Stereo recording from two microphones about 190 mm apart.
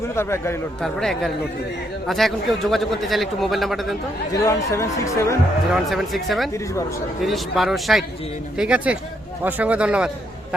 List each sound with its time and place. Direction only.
0.2 s speech: 15° left (ahead or behind)
0.8 s a man's voice: 5° left (ahead or behind)
4.4 s speech: 15° left (ahead or behind)
5.7 s a man's voice: centre (ahead or behind)